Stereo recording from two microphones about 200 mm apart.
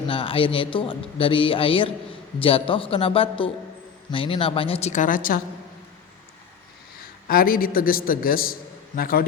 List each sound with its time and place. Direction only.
0.1 s a man's voice: 25° left (ahead or behind); by 5.4 s 45° left (ahead or behind)
7.3 s a man's voice: 45° left (ahead or behind)